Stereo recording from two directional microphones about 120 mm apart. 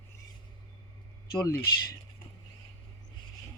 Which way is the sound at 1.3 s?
35° left (ahead or behind).